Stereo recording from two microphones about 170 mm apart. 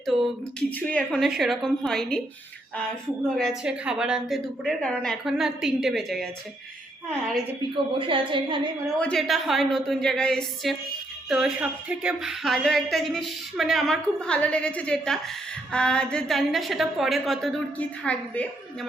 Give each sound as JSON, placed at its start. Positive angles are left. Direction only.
{"t": 0.0, "sound": "a sound", "side_deg": 0}
{"t": 0.9, "sound": "speech", "side_deg": 5}
{"t": 3.6, "sound": "speech", "side_deg": -5}
{"t": 7.9, "sound": "a woman's voice", "side_deg": -30}
{"t": 9.0, "sound": "speech", "side_deg": 5}